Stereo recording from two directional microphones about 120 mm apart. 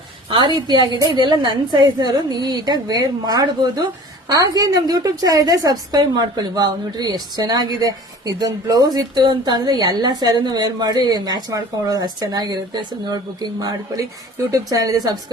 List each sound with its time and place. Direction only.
0.3 s a woman's voice: 40° right (ahead or behind)